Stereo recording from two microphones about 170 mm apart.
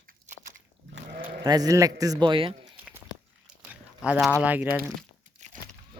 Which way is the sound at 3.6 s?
5° right (ahead or behind).